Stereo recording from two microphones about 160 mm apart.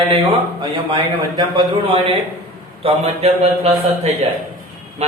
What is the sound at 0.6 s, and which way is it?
A man's voice, 30° right (ahead or behind).